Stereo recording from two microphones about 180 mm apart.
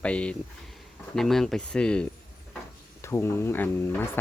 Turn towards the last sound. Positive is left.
turn(degrees=10)  # may be behind; listen again after turning